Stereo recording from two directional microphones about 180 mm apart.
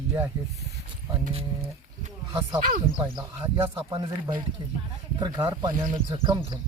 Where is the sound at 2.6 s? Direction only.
50° right (ahead or behind).